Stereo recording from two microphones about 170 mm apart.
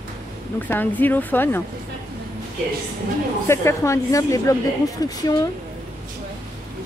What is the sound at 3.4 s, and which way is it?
Speech, 15° left (ahead or behind).